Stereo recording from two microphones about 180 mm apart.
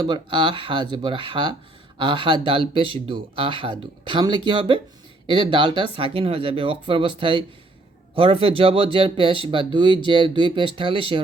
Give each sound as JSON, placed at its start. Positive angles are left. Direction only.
{"t": 0.0, "sound": "speech", "side_deg": -25}